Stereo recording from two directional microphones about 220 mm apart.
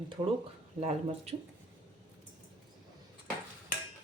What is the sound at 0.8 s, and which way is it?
Speech, 30° right (ahead or behind).